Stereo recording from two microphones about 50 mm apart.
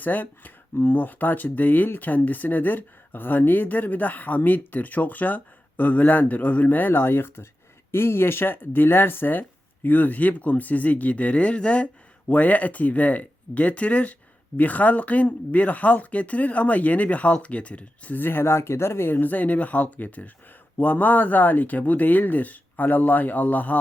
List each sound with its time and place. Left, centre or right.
0.0 s speech: left
7.0 s speech: left
18.2 s speech: left